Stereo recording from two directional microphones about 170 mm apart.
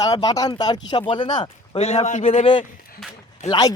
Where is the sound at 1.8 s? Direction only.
40° left (ahead or behind).